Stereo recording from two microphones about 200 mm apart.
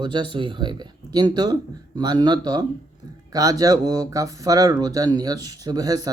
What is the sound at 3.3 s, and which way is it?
Speech, 20° right (ahead or behind).